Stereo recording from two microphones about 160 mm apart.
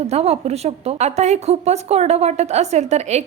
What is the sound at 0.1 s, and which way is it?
A woman's voice, 40° right (ahead or behind).